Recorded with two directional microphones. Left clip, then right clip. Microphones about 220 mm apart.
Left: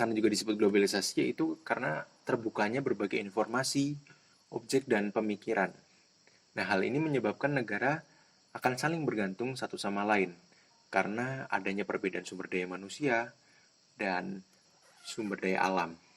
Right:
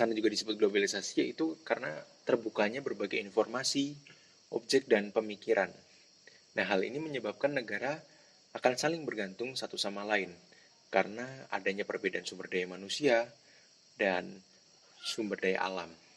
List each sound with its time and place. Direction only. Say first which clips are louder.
0.0 s speech: even; 30° left (ahead or behind)
3.3 s speech: right 2 dB; 20° left (ahead or behind)
3.6 s speech: left 1 dB; 35° left (ahead or behind)